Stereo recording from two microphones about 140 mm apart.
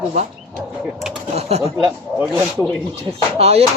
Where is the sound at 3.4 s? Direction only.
50° right (ahead or behind).